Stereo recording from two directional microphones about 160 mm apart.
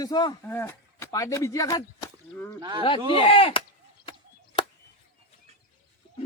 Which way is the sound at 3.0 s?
35° left (ahead or behind).